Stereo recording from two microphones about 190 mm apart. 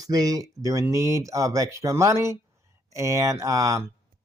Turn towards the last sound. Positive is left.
turn(degrees=-15)  # may be behind; listen again after turning